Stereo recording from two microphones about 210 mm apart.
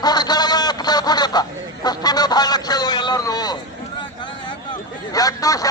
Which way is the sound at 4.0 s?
20° left (ahead or behind).